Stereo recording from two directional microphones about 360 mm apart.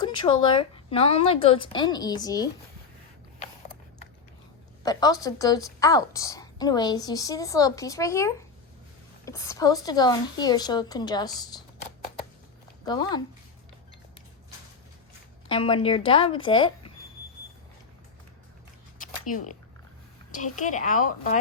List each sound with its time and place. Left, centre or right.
0.0 s a woman's voice: centre
4.8 s a woman's voice: centre
12.8 s speech: centre
15.4 s a woman's voice: centre
18.9 s a sound: left
20.3 s a woman's voice: left